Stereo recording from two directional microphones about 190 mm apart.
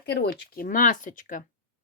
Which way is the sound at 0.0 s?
60° left (ahead or behind).